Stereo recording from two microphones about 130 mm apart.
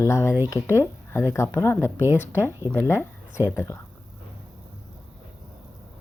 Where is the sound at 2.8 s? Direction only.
20° left (ahead or behind).